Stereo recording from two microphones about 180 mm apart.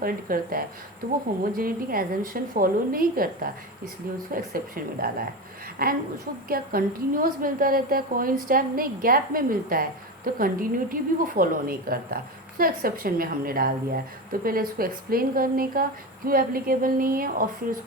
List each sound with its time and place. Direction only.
0.0 s a woman's voice: 55° right (ahead or behind)